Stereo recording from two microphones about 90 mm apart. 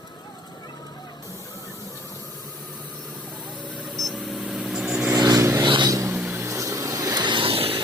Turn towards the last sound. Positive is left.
turn(degrees=-90)